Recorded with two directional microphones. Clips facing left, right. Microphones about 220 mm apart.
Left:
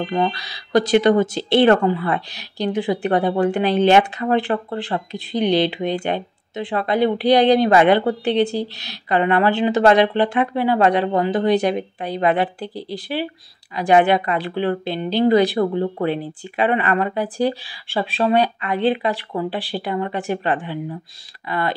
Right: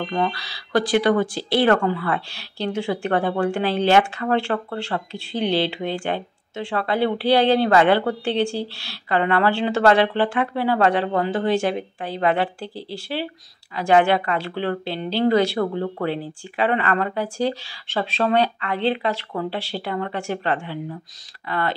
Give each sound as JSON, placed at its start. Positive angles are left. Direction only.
{"t": 0.1, "sound": "speech", "side_deg": 20}